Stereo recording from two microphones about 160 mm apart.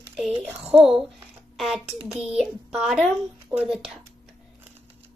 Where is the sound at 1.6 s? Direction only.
Centre (ahead or behind).